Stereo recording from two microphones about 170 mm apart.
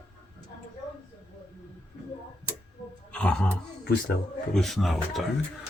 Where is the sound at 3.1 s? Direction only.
5° left (ahead or behind).